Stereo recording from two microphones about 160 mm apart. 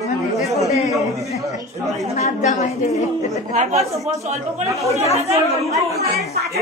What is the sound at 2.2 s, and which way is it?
Speech, 50° left (ahead or behind).